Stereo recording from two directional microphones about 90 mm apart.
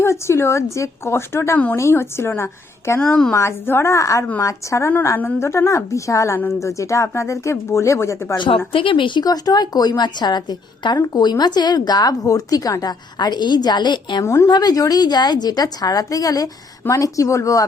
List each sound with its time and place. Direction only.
0.0 s a woman's voice: 30° left (ahead or behind)
3.0 s speech: 10° left (ahead or behind)
3.3 s speech: 30° left (ahead or behind)
8.4 s speech: 80° left; by 9.2 s 65° left (ahead or behind)
9.2 s speech: 45° left (ahead or behind)
14.3 s speech: 30° left (ahead or behind)
14.5 s speech: 50° left (ahead or behind)